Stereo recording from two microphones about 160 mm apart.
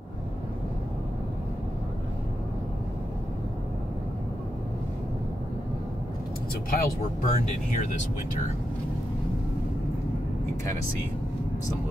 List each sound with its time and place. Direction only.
6.7 s speech: 70° left (ahead or behind)